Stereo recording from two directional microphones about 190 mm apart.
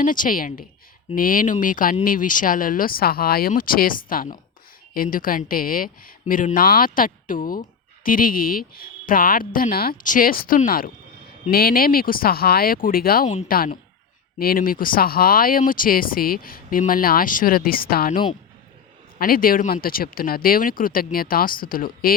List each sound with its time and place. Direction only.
0.0 s speech: 45° left (ahead or behind)
19.2 s speech: 50° left (ahead or behind)